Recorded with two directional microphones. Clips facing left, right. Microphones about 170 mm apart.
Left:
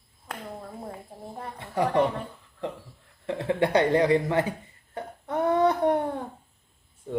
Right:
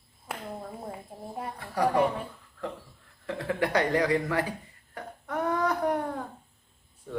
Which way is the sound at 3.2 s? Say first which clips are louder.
Left 4 dB; 25° left (ahead or behind).